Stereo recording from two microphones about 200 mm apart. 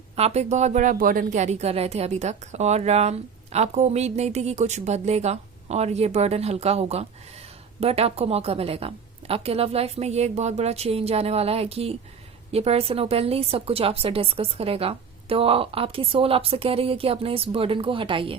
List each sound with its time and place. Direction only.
0.2 s a woman's voice: 30° right (ahead or behind)